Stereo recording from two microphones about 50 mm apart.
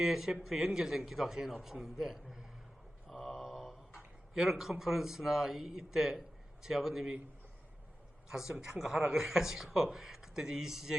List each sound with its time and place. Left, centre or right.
0.0 s speech: centre
3.1 s mantra: centre
4.4 s speech: centre
8.3 s speech: centre
8.5 s a man's voice: right